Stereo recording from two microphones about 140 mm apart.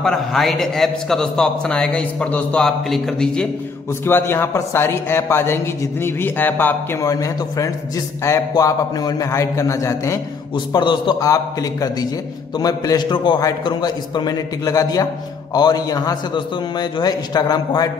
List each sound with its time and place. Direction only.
0.0 s a man's voice: centre (ahead or behind)
4.0 s a man's voice: 15° left (ahead or behind)
10.7 s a man's voice: 35° left (ahead or behind)